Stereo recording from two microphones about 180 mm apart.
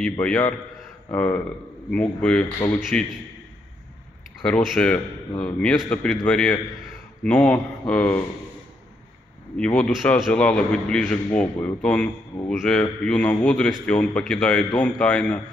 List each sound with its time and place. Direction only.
0.0 s a man's voice: 5° left (ahead or behind)
4.4 s a man's voice: 5° left (ahead or behind)
9.6 s a man's voice: 5° left (ahead or behind)